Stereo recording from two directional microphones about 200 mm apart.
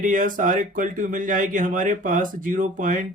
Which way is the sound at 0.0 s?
40° right (ahead or behind).